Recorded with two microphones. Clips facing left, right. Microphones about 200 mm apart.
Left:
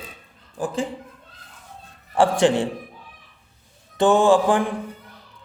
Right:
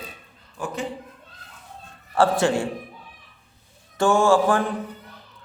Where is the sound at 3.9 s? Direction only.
20° left (ahead or behind).